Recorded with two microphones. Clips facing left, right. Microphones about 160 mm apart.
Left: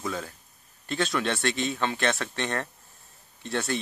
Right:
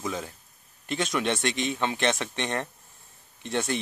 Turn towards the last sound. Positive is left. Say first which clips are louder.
# right 1 dB
turn(degrees=-20)  # may be behind; listen again after turning